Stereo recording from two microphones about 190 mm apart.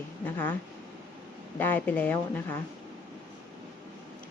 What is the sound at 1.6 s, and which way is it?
Speech, 10° left (ahead or behind).